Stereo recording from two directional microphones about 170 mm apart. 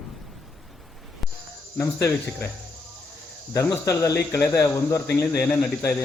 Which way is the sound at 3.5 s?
15° left (ahead or behind).